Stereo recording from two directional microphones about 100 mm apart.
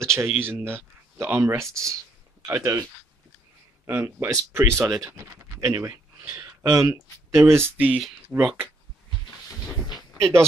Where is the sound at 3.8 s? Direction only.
25° right (ahead or behind).